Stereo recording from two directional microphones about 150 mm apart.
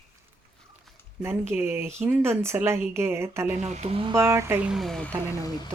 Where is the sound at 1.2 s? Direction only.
15° right (ahead or behind).